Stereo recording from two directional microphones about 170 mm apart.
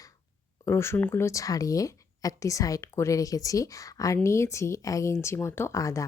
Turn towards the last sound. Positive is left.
turn(degrees=20)  # may be behind; listen again after turning